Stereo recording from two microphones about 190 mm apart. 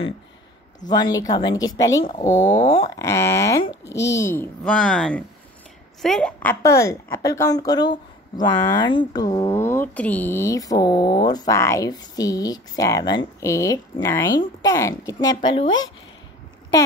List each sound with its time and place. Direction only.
0.8 s a woman's voice: 20° left (ahead or behind)
2.5 s speech: 30° left (ahead or behind)
3.0 s a woman's voice: 15° left (ahead or behind)